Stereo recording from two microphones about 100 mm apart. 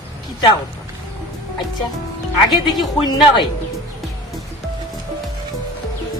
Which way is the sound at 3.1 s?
45° left (ahead or behind).